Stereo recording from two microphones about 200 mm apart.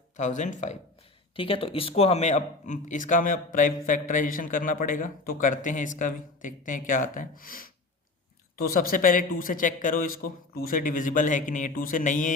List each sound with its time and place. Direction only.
0.2 s a man's voice: 35° left (ahead or behind)